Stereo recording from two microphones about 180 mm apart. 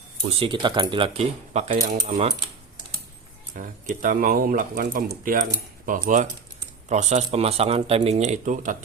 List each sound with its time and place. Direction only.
0.2 s speech: 30° right (ahead or behind)
3.5 s speech: 50° right (ahead or behind)